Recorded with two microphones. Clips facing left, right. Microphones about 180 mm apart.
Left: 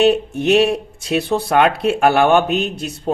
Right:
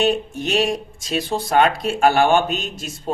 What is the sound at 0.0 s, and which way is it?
A man's voice, 65° left (ahead or behind).